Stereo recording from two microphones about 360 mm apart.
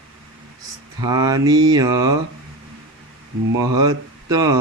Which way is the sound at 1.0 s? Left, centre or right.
Centre.